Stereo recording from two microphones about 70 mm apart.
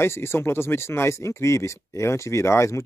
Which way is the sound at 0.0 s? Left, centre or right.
Left.